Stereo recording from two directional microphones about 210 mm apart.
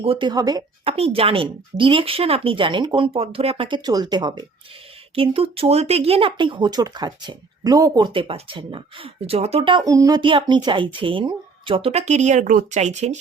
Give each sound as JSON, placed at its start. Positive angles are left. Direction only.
{"t": 0.0, "sound": "speech", "side_deg": -25}